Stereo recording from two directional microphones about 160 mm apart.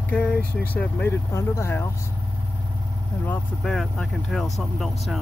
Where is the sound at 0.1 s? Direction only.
10° left (ahead or behind).